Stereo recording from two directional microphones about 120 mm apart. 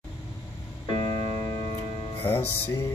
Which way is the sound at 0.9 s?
35° left (ahead or behind).